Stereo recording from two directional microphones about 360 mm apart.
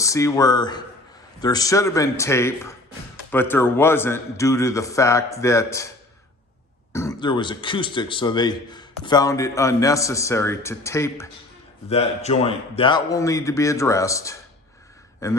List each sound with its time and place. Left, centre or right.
0.0 s a man's voice: centre
6.9 s a man's voice: centre